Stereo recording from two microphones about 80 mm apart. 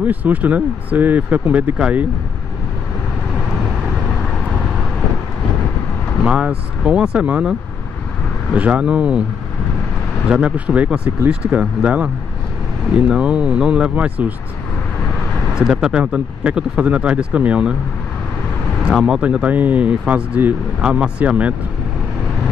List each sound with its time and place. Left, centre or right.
0.0 s speech: right
6.2 s speech: centre
8.5 s speech: centre
10.2 s speech: centre
13.1 s speech: centre
15.5 s speech: centre
18.9 s speech: centre